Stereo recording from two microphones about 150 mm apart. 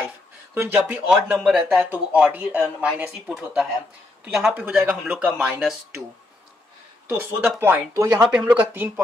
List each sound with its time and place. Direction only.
0.6 s speech: 15° right (ahead or behind)
7.1 s speech: 15° right (ahead or behind)
8.4 s speech: 10° right (ahead or behind)